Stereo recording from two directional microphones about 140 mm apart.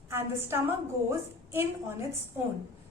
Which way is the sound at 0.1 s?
15° right (ahead or behind).